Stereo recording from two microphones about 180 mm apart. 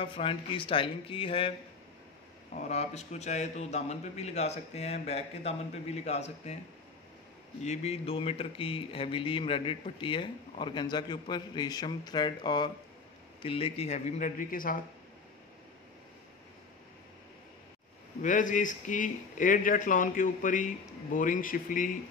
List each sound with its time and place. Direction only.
0.0 s speech: 30° left (ahead or behind)
2.5 s a man's voice: 40° left (ahead or behind)
7.6 s a man's voice: 35° left (ahead or behind)
18.2 s speech: 45° left (ahead or behind)